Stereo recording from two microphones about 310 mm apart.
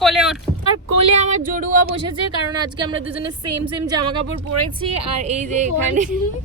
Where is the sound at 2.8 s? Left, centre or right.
Centre.